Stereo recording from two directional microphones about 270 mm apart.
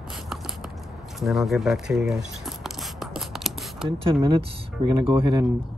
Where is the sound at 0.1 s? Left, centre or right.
Centre.